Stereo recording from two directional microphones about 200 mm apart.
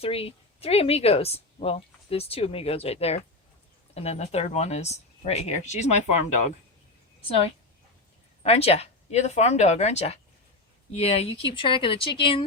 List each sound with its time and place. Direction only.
0.0 s a woman's voice: 30° left (ahead or behind)
8.4 s a woman's voice: 30° left (ahead or behind)